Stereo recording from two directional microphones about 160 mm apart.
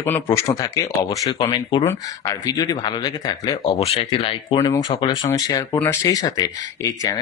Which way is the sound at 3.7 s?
35° left (ahead or behind).